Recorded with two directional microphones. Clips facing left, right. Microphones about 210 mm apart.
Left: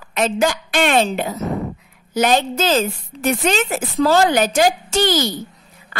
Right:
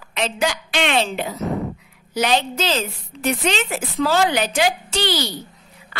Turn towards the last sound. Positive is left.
turn(degrees=45)  # may be behind; listen again after turning